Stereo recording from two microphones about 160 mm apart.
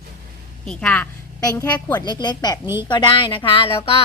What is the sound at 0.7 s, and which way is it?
Speech, 5° left (ahead or behind).